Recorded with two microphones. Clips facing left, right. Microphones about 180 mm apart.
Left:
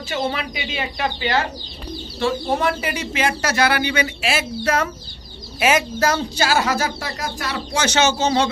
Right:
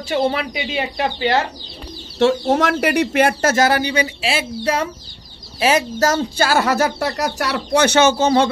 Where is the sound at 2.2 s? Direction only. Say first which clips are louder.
Right 5 dB; 80° right.